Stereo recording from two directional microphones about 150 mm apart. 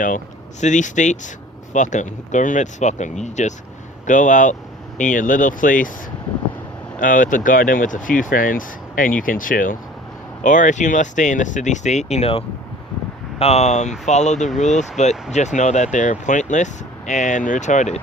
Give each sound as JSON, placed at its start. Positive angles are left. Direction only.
{"t": 0.6, "sound": "speech", "side_deg": 55}
{"t": 7.0, "sound": "speech", "side_deg": 60}